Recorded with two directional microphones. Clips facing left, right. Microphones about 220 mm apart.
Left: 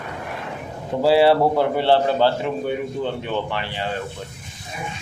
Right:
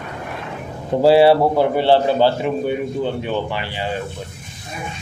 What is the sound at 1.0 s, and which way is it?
Speech, 20° right (ahead or behind).